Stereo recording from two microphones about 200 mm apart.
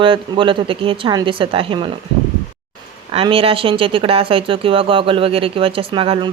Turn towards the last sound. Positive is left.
turn(degrees=-25)  # may be behind; listen again after turning